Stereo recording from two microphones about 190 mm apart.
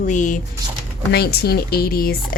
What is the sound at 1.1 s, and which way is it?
Speech, 55° left (ahead or behind).